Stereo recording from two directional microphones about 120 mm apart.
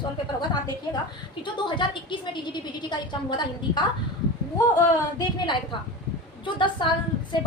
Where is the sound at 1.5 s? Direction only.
40° left (ahead or behind).